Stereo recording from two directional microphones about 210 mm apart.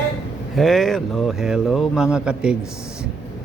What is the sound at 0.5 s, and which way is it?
Speech, centre (ahead or behind).